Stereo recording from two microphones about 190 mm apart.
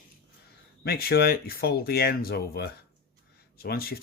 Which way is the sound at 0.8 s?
55° left (ahead or behind).